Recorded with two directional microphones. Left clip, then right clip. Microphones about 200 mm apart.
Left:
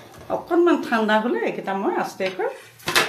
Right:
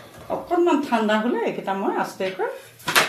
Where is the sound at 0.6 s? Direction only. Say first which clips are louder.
Left 1 dB; 25° left (ahead or behind).